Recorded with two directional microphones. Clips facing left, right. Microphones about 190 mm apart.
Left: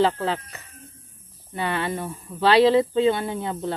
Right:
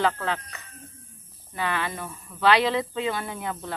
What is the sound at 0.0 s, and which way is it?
Speech, 30° left (ahead or behind).